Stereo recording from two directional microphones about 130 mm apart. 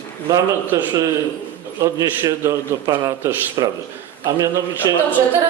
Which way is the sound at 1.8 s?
25° right (ahead or behind).